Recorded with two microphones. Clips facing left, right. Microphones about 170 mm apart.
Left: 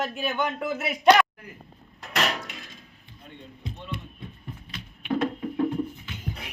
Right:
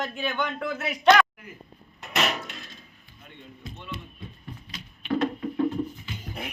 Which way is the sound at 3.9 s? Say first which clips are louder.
Left 2 dB; 55° left (ahead or behind).